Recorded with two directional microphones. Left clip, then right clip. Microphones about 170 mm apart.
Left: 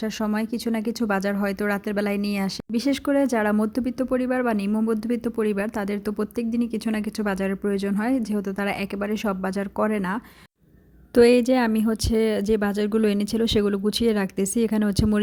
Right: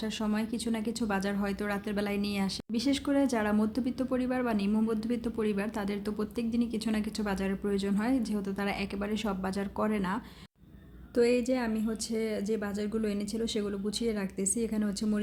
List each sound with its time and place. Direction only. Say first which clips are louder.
0.0 s a woman's voice: left 7 dB; 40° left (ahead or behind)
11.1 s speech: left 10 dB; 50° left (ahead or behind)